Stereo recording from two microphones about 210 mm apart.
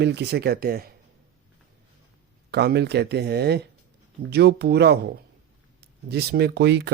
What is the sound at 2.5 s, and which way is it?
Speech, 50° right (ahead or behind).